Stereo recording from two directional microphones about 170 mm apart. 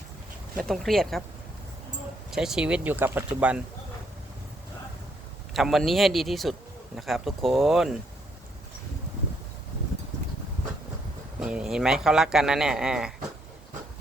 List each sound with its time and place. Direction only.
0.5 s speech: centre (ahead or behind)
2.3 s speech: 5° right (ahead or behind)
5.5 s speech: centre (ahead or behind)
11.3 s speech: 5° right (ahead or behind)